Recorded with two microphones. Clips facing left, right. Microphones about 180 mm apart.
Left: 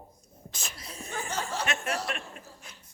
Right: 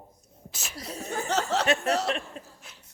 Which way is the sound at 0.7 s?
40° right (ahead or behind).